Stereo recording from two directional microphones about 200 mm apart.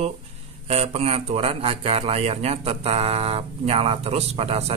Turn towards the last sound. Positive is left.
turn(degrees=-30)  # may be behind; listen again after turning